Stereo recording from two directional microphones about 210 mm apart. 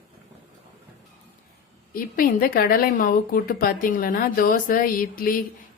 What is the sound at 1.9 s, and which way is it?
A woman's voice, 45° left (ahead or behind).